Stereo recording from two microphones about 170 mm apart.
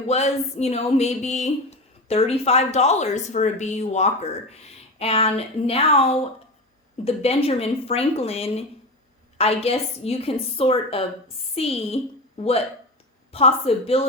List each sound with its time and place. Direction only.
0.1 s speech: 40° left (ahead or behind)